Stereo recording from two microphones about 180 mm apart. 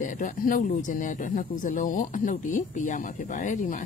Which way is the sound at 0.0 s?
45° left (ahead or behind).